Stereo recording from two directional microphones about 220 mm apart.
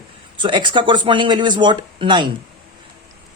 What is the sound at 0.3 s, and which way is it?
Speech, 20° right (ahead or behind).